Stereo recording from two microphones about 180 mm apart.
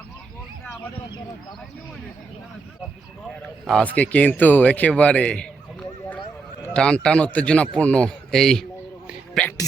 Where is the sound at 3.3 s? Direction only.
5° left (ahead or behind).